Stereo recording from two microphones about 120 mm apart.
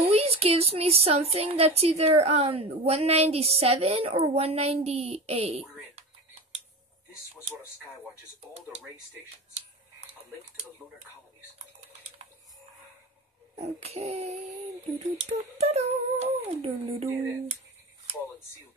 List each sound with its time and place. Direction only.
0.1 s a woman's voice: 60° right (ahead or behind)
13.6 s a woman's voice: 60° right (ahead or behind)